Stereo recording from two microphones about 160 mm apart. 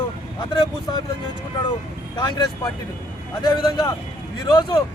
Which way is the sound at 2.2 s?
30° left (ahead or behind).